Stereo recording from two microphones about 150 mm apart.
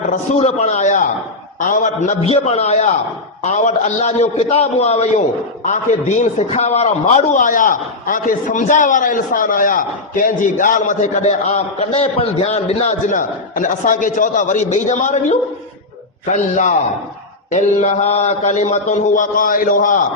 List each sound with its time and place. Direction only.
0.3 s mantra: 45° left (ahead or behind)
5.6 s a man's voice: 55° left (ahead or behind)
17.5 s mantra: 50° left (ahead or behind)